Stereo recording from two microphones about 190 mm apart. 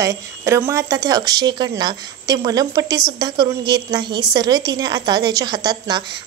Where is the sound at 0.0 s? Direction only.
15° right (ahead or behind).